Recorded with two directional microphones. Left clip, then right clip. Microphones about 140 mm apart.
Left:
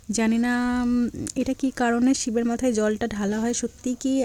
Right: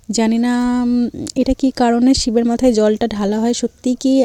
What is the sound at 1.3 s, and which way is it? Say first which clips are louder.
Speech: right 10 dB; 30° right (ahead or behind).